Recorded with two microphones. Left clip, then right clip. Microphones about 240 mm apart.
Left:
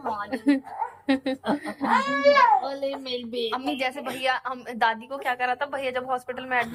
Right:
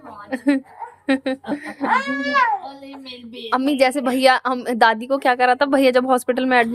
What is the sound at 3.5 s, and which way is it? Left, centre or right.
A woman's voice, right.